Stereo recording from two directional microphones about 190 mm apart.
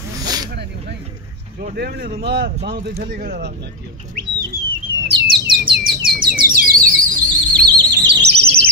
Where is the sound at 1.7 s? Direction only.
55° right (ahead or behind).